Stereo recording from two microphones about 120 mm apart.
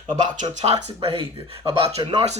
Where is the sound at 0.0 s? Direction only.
40° right (ahead or behind).